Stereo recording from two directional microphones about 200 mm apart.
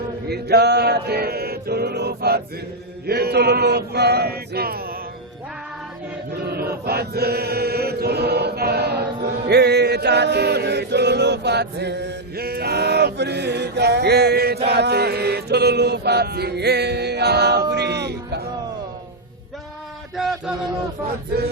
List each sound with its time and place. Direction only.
0.3 s male singing: 55° right (ahead or behind)
6.4 s chant: 50° right (ahead or behind)
20.1 s a sound: centre (ahead or behind)